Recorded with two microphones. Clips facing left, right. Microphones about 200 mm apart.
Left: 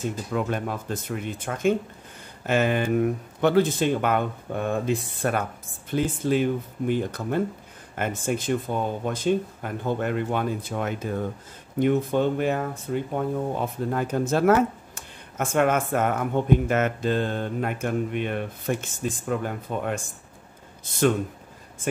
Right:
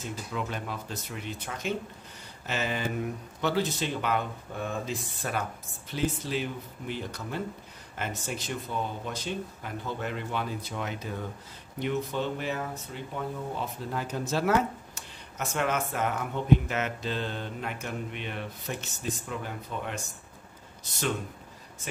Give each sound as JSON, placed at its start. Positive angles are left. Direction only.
{"t": 0.0, "sound": "speech", "side_deg": 50}